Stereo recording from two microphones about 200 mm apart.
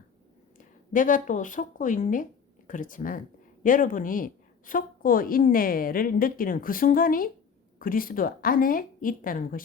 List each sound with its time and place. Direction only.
0.6 s a woman's voice: 40° left (ahead or behind)